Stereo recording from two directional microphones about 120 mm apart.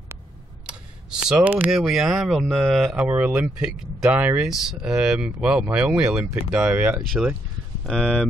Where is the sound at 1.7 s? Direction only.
Centre (ahead or behind).